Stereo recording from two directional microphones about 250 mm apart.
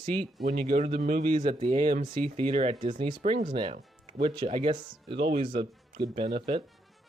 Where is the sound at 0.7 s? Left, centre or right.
Right.